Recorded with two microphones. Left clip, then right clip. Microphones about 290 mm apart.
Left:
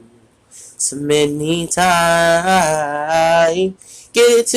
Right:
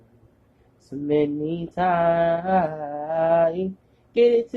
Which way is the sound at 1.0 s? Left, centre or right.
Left.